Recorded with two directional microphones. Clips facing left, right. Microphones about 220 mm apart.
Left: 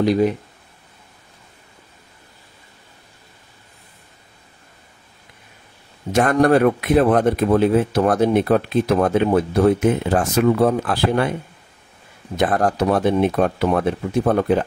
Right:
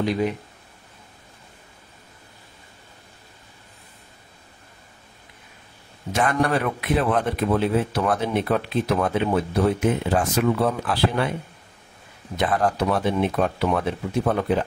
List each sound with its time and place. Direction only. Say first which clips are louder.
6.1 s speech: left 7 dB; 50° left (ahead or behind)
12.4 s speech: left 4 dB; 45° left (ahead or behind)